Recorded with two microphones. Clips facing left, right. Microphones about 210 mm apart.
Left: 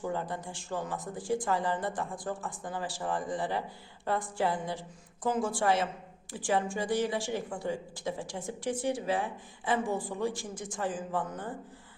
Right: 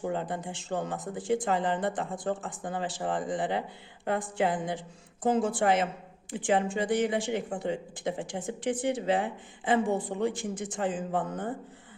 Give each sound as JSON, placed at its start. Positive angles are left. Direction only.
{"t": 0.1, "sound": "speech", "side_deg": -20}